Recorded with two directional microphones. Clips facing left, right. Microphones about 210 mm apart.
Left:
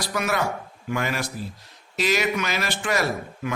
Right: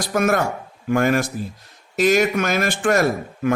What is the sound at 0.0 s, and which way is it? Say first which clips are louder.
A man's voice: right 6 dB; 50° right (ahead or behind).